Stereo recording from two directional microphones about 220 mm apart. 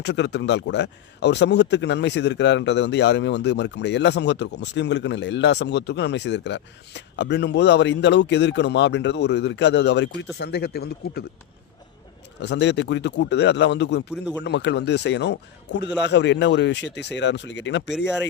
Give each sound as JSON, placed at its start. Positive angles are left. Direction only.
{"t": 0.0, "sound": "speech", "side_deg": 50}
{"t": 12.4, "sound": "speech", "side_deg": 55}